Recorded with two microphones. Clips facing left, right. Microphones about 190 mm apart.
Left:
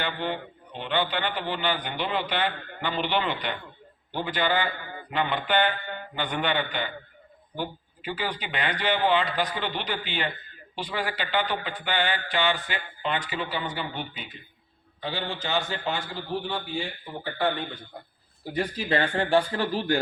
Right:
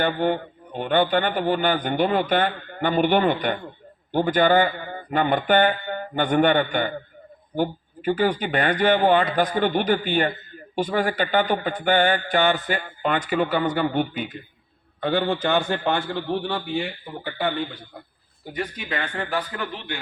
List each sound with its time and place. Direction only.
0.0 s a man's voice: 50° right (ahead or behind); by 16.9 s 65° right (ahead or behind)
18.5 s speech: 30° left (ahead or behind)